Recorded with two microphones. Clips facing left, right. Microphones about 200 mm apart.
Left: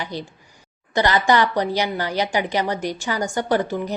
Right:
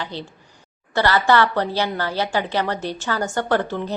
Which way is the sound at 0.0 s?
15° left (ahead or behind).